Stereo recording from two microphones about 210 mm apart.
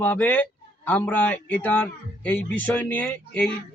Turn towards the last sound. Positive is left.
turn(degrees=5)  # may be behind; listen again after turning